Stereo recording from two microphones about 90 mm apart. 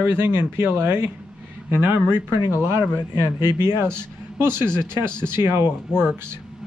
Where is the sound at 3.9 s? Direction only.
25° right (ahead or behind).